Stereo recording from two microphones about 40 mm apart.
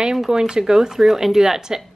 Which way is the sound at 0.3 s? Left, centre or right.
Centre.